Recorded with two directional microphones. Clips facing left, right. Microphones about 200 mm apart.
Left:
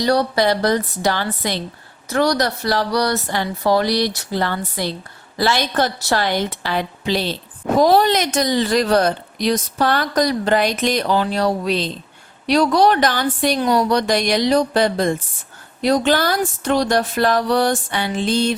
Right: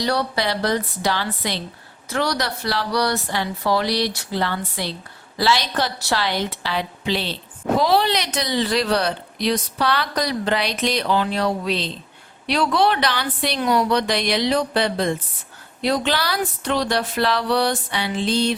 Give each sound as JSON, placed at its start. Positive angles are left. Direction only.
{"t": 0.0, "sound": "a woman's voice", "side_deg": 45}